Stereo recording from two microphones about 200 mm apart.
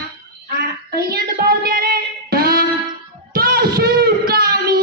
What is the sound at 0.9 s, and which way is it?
Music, 50° right (ahead or behind).